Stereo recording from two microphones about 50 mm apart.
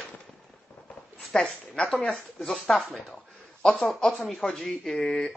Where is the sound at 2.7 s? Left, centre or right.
Centre.